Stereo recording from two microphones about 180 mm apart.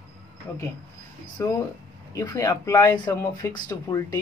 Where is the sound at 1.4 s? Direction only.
15° left (ahead or behind).